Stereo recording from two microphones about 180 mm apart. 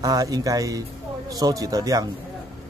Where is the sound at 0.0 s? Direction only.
20° right (ahead or behind).